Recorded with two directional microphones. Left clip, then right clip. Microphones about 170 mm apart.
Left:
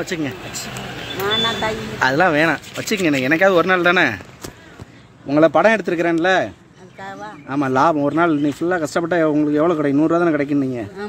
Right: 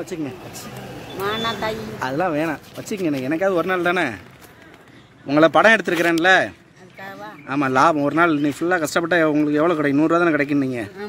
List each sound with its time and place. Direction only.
0.0 s speech: 5° right (ahead or behind)
1.2 s speech: 25° right (ahead or behind)
2.0 s speech: centre (ahead or behind)
5.3 s speech: 5° right (ahead or behind)